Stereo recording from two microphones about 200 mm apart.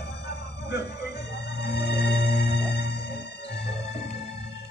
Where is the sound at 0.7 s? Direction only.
55° left (ahead or behind).